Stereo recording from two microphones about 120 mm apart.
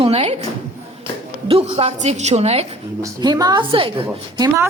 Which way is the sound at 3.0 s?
35° right (ahead or behind).